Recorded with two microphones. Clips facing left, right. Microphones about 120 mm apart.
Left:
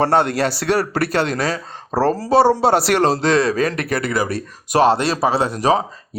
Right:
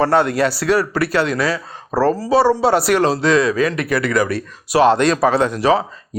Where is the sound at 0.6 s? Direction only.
55° left (ahead or behind).